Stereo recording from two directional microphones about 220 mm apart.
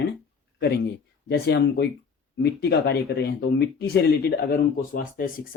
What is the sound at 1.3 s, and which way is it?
Speech, 50° left (ahead or behind).